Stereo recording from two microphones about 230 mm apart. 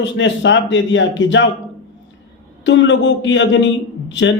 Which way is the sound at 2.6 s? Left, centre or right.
Left.